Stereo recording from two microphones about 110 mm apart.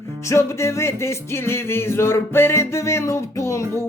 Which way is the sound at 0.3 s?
25° left (ahead or behind).